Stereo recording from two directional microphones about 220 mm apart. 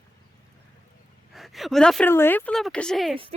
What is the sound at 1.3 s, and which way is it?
A woman's voice, centre (ahead or behind).